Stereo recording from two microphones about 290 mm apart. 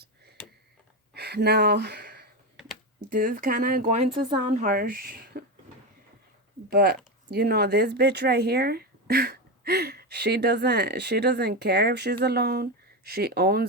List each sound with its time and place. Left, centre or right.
1.1 s speech: right
2.6 s typing: centre
3.1 s speech: right
4.1 s speech: centre; by 5.5 s right
6.7 s speech: right